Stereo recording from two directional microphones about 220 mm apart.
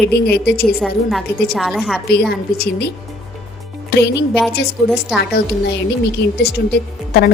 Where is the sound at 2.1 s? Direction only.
45° left (ahead or behind).